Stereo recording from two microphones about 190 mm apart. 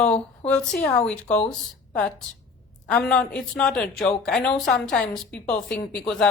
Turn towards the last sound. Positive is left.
turn(degrees=5)  # may be behind; listen again after turning